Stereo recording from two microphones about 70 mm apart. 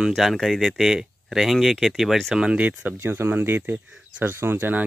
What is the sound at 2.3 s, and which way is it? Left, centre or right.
Speech, centre.